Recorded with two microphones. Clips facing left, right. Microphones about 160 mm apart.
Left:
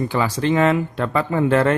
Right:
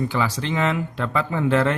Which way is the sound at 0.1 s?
50° left (ahead or behind).